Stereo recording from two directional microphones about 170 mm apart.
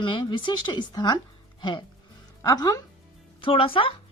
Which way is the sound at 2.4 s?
20° left (ahead or behind).